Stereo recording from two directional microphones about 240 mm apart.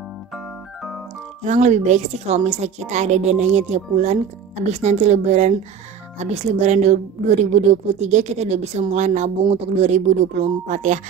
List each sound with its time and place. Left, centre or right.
1.4 s a woman's voice: right
10.7 s music: right